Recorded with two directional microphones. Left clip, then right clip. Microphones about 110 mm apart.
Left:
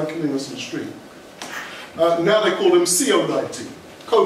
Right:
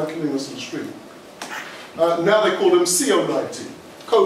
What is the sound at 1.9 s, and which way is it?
Speech, centre (ahead or behind).